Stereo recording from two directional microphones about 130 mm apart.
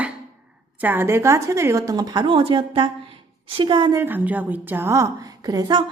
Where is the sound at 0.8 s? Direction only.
15° right (ahead or behind); by 4.0 s 35° right (ahead or behind).